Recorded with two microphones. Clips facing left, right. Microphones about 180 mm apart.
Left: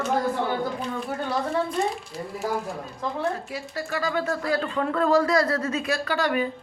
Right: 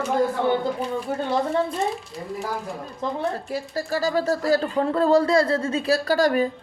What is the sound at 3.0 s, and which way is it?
Speech, 20° right (ahead or behind).